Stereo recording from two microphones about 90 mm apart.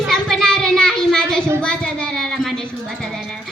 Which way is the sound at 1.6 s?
10° left (ahead or behind).